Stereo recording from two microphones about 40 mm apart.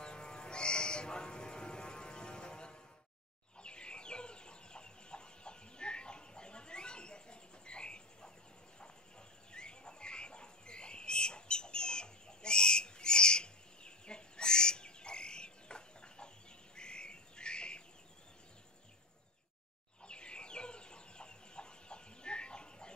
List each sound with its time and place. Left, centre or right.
0.0 s a sound: left
3.5 s chicken: left
9.5 s bird: left
16.7 s squawk: left
20.1 s chicken: left